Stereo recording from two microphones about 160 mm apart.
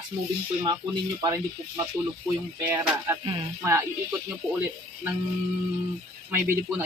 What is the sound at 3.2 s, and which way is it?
Speech, 30° right (ahead or behind).